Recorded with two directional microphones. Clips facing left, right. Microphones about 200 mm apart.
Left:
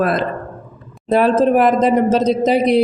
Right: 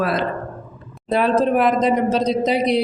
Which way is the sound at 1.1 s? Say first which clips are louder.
Left 4 dB; 50° left (ahead or behind).